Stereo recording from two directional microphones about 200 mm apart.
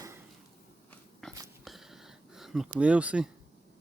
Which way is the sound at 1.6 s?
Centre (ahead or behind).